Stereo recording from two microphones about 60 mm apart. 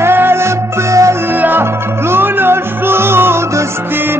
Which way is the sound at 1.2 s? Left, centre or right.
Right.